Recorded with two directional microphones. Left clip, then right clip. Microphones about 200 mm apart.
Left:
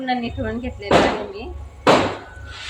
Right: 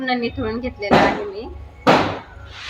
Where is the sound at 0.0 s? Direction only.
5° right (ahead or behind).